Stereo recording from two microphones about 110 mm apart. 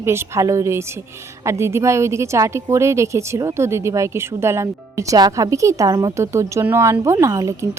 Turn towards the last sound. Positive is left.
turn(degrees=-30)  # may be behind; listen again after turning